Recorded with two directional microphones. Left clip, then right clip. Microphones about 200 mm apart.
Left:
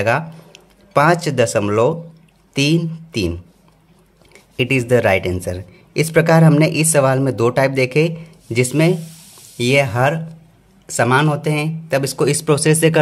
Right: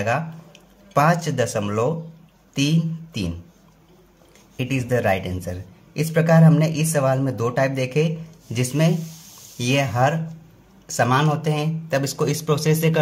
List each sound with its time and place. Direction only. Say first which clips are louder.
0.0 s speech: left 6 dB; 35° left (ahead or behind)
4.6 s speech: left 8 dB; 40° left (ahead or behind)